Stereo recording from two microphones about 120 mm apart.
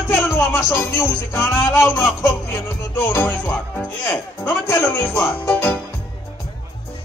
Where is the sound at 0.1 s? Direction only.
15° left (ahead or behind).